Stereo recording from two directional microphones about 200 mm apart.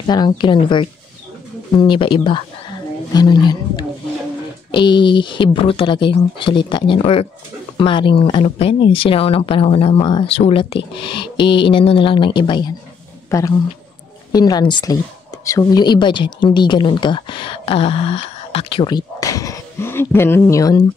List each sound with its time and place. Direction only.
0.0 s speech: 20° left (ahead or behind)